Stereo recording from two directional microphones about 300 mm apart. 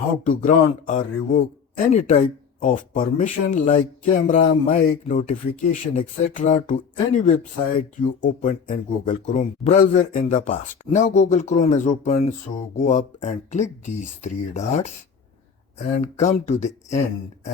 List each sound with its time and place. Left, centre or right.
0.3 s speech: left
16.1 s speech: left